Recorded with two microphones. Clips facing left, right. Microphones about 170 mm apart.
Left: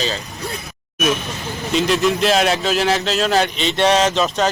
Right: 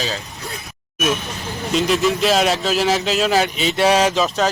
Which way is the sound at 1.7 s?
Centre (ahead or behind).